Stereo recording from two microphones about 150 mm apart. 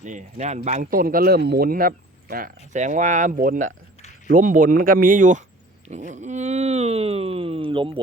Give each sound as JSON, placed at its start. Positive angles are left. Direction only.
{"t": 0.0, "sound": "speech", "side_deg": -55}
{"t": 2.7, "sound": "speech", "side_deg": -55}
{"t": 5.9, "sound": "dog", "side_deg": -50}